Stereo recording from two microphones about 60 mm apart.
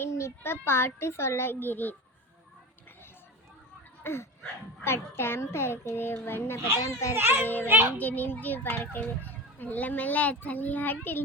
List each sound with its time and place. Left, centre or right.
0.0 s a child's voice: left
4.0 s a sound: left
4.8 s a child's voice: left
7.2 s a child's voice: right
7.9 s a child's voice: left